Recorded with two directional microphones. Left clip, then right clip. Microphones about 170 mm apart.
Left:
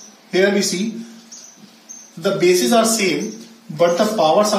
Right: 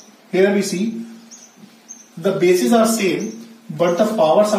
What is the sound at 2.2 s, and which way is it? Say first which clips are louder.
Speech: even; 20° right (ahead or behind).